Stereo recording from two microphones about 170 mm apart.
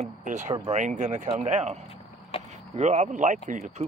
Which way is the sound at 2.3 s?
35° left (ahead or behind).